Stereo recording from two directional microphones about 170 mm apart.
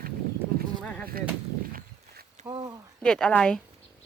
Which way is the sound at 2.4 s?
25° right (ahead or behind).